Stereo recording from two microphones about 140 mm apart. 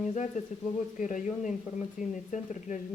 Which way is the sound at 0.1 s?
60° left (ahead or behind).